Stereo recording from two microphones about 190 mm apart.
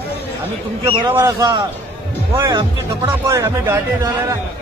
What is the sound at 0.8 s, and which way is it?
A man's voice, 15° right (ahead or behind).